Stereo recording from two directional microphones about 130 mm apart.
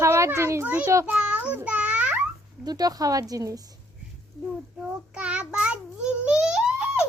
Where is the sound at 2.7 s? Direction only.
30° right (ahead or behind).